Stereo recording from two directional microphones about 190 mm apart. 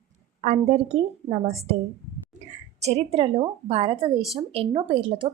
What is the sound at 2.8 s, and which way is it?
A woman's voice, 35° right (ahead or behind).